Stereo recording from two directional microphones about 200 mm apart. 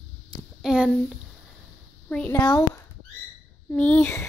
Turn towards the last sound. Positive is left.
turn(degrees=10)  # may be behind; listen again after turning